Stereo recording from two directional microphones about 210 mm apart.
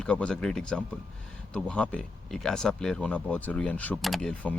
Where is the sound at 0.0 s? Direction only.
5° left (ahead or behind).